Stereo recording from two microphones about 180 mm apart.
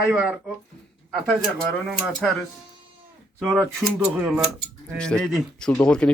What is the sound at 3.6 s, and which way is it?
Speech, 5° right (ahead or behind).